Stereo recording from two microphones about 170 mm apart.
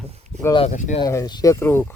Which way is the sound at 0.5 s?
40° left (ahead or behind).